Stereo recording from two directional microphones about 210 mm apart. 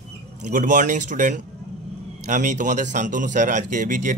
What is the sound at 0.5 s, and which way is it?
A man's voice, 40° right (ahead or behind).